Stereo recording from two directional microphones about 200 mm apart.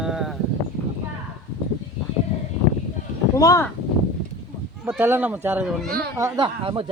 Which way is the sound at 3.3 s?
15° left (ahead or behind).